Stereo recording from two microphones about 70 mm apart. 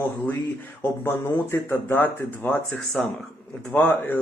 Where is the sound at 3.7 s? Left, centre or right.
Left.